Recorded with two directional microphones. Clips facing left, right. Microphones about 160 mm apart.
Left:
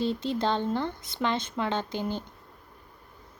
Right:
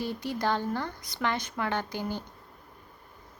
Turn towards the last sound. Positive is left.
turn(degrees=20)  # may be behind; listen again after turning